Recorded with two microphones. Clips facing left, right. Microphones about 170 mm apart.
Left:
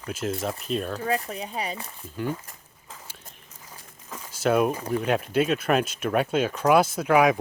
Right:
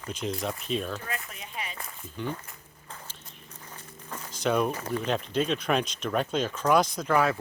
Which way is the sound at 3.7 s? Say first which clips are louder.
Even; 5° left (ahead or behind).